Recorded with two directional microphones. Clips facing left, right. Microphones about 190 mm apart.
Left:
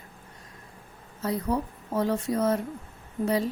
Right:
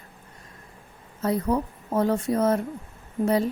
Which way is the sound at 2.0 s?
50° right (ahead or behind).